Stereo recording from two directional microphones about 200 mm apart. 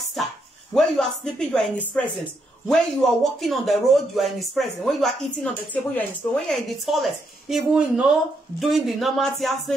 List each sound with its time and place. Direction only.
0.7 s a man's voice: centre (ahead or behind)